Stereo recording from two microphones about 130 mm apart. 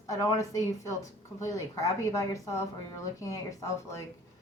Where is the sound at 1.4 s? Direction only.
25° left (ahead or behind).